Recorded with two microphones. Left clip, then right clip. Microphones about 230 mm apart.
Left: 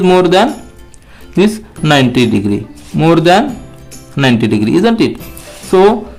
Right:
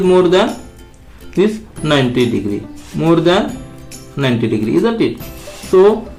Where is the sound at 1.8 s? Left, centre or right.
Left.